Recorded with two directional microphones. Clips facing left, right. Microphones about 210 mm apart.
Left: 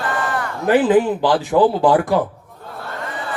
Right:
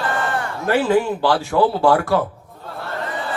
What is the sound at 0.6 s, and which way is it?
A man's voice, 15° left (ahead or behind).